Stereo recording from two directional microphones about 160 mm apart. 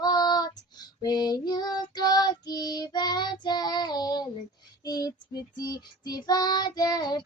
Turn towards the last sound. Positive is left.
turn(degrees=25)  # may be behind; listen again after turning